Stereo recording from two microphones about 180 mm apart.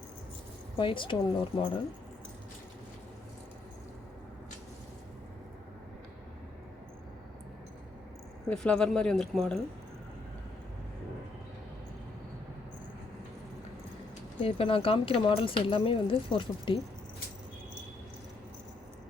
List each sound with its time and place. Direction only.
0.8 s speech: 25° left (ahead or behind)
8.4 s speech: 5° left (ahead or behind)
14.4 s speech: 30° left (ahead or behind)